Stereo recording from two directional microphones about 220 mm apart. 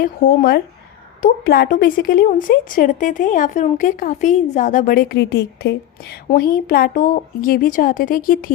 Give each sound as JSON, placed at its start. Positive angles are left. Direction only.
{"t": 0.0, "sound": "speech", "side_deg": 45}